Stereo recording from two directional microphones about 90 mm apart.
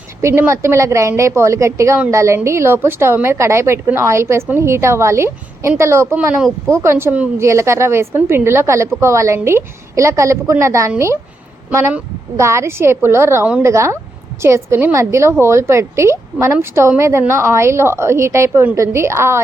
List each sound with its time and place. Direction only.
0.2 s a woman's voice: 30° right (ahead or behind)
12.4 s a woman's voice: 30° right (ahead or behind)